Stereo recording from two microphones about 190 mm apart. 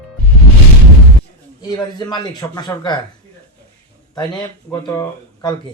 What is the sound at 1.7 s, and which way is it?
Speech, 20° left (ahead or behind).